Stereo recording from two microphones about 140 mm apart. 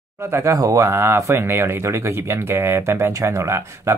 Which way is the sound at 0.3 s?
20° right (ahead or behind).